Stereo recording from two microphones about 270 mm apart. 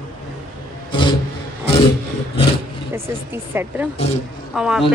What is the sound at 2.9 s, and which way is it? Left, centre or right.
A woman's voice, centre.